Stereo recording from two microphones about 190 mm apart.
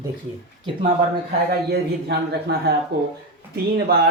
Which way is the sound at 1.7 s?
60° right (ahead or behind).